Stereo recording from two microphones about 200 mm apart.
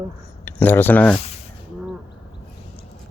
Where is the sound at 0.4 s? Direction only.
10° left (ahead or behind).